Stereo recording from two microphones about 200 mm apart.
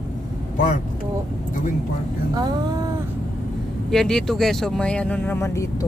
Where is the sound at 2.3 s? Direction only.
20° right (ahead or behind).